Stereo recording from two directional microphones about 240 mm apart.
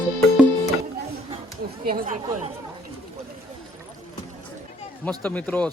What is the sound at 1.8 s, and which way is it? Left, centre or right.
Speech, right.